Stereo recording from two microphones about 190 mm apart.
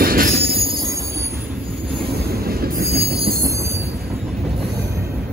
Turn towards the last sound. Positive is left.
turn(degrees=-30)  # may be behind; listen again after turning